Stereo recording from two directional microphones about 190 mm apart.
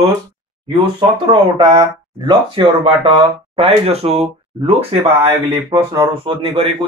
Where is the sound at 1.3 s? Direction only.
25° right (ahead or behind).